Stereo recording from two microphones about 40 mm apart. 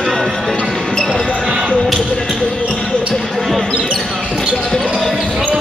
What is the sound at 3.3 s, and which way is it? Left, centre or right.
Basketball bounce, centre.